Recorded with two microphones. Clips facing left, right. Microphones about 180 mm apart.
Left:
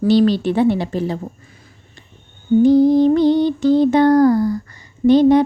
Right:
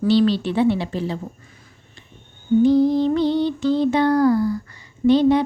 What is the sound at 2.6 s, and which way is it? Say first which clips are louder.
A woman's voice: left 5 dB; 45° left (ahead or behind).